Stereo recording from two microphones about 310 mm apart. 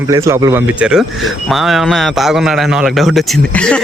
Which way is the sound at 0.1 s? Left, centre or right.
Centre.